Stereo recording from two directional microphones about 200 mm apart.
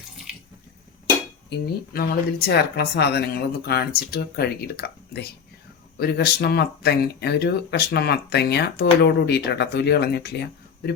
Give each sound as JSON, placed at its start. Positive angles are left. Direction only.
{"t": 1.5, "sound": "speech", "side_deg": 50}